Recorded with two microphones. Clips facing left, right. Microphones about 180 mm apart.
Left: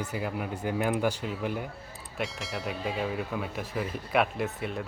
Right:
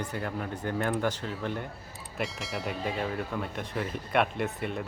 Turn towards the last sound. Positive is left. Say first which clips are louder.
# even
turn(degrees=0)  # may be behind; listen again after turning